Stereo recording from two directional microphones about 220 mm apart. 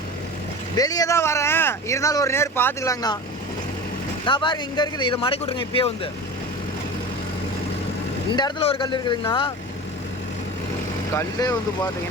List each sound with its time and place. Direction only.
0.8 s speech: 15° left (ahead or behind)
4.3 s speech: 20° left (ahead or behind)
8.3 s speech: 20° left (ahead or behind)
11.1 s speech: 15° left (ahead or behind)